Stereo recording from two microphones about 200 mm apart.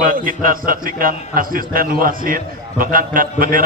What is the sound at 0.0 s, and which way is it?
A man's voice, 45° right (ahead or behind).